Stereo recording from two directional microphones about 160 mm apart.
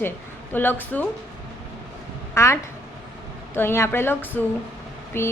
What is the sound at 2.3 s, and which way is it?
A woman's voice, 15° left (ahead or behind).